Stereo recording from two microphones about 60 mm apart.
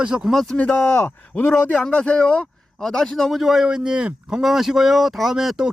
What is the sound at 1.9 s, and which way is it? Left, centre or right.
Speech, centre.